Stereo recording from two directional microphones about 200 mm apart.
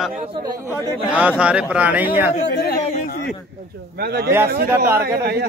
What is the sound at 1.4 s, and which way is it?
Speech, 5° right (ahead or behind).